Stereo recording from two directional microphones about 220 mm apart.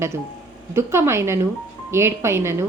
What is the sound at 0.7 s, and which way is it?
Speech, 10° right (ahead or behind).